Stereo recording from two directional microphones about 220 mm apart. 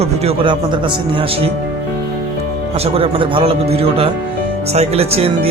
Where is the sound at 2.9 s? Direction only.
25° right (ahead or behind).